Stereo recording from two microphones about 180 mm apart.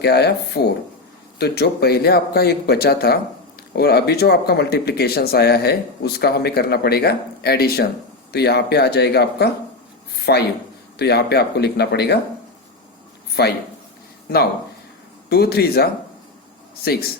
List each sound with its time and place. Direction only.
0.0 s speech: 65° left (ahead or behind)
13.4 s speech: 60° left (ahead or behind)
15.3 s speech: 60° left (ahead or behind)